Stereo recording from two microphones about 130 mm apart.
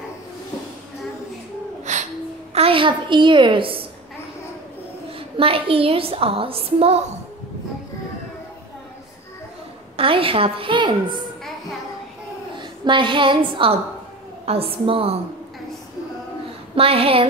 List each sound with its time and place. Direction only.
1.9 s a sound: 65° right (ahead or behind)
2.5 s a woman's voice: 45° right (ahead or behind)
5.4 s a woman's voice: 45° right (ahead or behind)
9.9 s a woman's voice: 45° right (ahead or behind)
12.5 s a woman's voice: 40° right (ahead or behind)
16.7 s a woman's voice: 45° right (ahead or behind)